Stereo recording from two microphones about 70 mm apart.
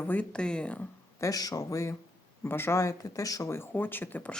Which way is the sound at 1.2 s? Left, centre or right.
Left.